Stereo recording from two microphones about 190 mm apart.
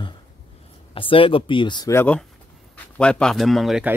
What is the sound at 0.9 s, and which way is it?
A man's voice, 30° left (ahead or behind).